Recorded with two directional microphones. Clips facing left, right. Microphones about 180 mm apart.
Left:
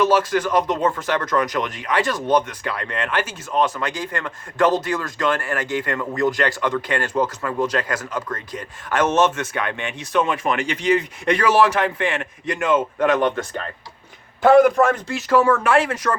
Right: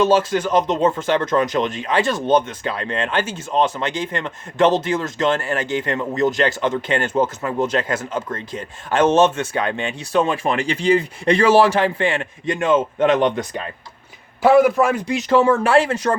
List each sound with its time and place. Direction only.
0.0 s speech: 25° right (ahead or behind)
14.4 s speech: 5° right (ahead or behind); by 16.1 s 30° right (ahead or behind)